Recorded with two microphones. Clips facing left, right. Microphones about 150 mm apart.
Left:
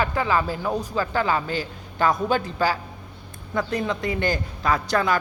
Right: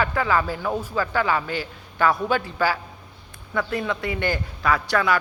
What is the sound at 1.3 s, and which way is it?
Speech, 30° left (ahead or behind).